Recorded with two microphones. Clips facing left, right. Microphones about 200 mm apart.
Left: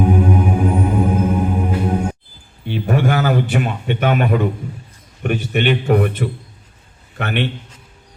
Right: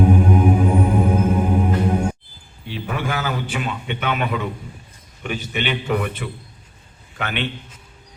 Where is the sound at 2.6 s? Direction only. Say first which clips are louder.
Left 8 dB; 45° left (ahead or behind).